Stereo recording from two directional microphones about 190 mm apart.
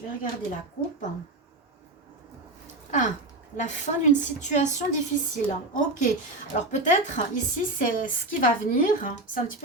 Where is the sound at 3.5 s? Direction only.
40° left (ahead or behind).